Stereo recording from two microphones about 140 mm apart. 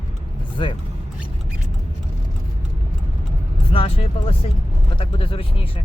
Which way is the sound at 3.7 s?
40° left (ahead or behind).